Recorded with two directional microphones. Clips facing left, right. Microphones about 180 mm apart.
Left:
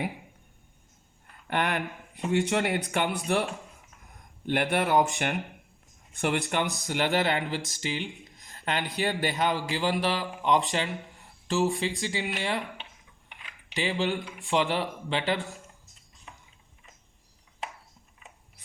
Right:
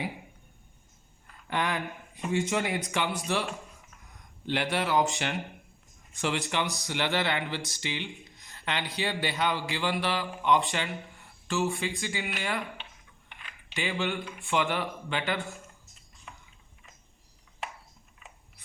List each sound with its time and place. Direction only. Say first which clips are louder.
1.5 s speech: left 2 dB; 60° left (ahead or behind)
6.8 s speech: left 5 dB; 45° left (ahead or behind)
13.7 s speech: left 3 dB; 35° left (ahead or behind)